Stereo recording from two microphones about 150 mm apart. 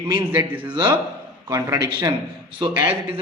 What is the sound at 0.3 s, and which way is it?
Speech, 10° right (ahead or behind).